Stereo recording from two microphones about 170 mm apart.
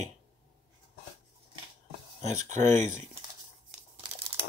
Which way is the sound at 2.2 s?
45° right (ahead or behind).